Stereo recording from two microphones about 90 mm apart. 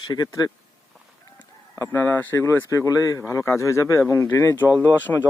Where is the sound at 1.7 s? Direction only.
30° left (ahead or behind).